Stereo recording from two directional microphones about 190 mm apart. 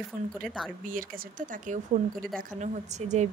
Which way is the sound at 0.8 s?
45° right (ahead or behind).